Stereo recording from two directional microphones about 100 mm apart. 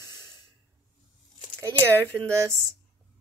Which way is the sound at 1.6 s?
25° right (ahead or behind).